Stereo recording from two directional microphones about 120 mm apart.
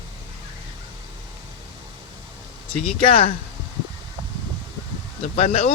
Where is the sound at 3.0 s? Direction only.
50° left (ahead or behind).